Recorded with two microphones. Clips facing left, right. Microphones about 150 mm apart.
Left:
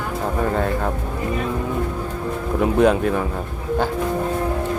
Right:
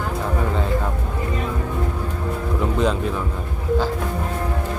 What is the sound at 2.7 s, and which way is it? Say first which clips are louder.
Speech: left 6 dB; 60° left (ahead or behind).